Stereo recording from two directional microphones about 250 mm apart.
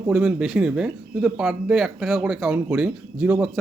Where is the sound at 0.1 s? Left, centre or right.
Centre.